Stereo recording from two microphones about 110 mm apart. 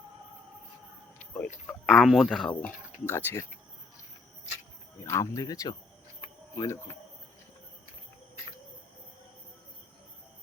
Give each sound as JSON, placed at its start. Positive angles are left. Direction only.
{"t": 1.3, "sound": "speech", "side_deg": 15}
{"t": 1.9, "sound": "speech", "side_deg": 0}
{"t": 4.9, "sound": "speech", "side_deg": 25}
{"t": 6.2, "sound": "cricket", "side_deg": 25}